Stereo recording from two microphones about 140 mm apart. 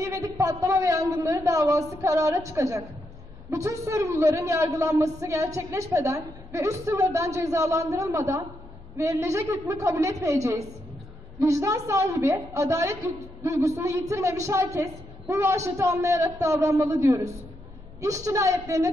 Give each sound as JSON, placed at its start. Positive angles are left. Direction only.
{"t": 0.0, "sound": "a man's voice", "side_deg": -25}